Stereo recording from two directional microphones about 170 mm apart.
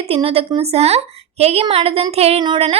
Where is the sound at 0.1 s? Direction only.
35° right (ahead or behind).